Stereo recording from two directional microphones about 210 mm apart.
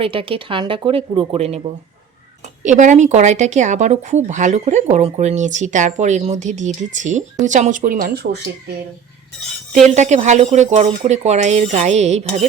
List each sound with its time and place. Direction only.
0.0 s speech: 25° right (ahead or behind)
2.6 s speech: 35° right (ahead or behind)
9.9 s speech: 35° right (ahead or behind)